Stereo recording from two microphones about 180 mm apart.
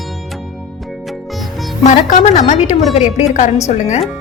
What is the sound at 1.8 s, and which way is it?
A woman's voice, 40° left (ahead or behind).